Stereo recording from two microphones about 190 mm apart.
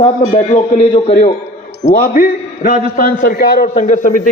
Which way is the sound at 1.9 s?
50° left (ahead or behind).